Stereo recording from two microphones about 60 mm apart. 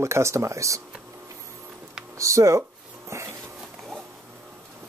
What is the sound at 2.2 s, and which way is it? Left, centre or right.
Speech, right.